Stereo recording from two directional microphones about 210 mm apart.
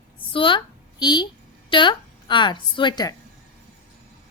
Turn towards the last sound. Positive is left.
turn(degrees=20)  # may be behind; listen again after turning